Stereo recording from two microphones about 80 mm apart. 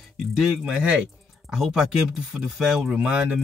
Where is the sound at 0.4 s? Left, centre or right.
Centre.